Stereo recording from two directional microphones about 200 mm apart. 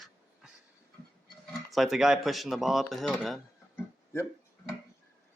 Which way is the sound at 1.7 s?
Centre (ahead or behind).